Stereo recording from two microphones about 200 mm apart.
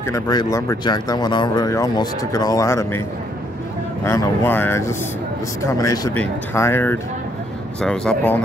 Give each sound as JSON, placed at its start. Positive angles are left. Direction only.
{"t": 0.0, "sound": "speech", "side_deg": 20}
{"t": 4.0, "sound": "speech", "side_deg": 10}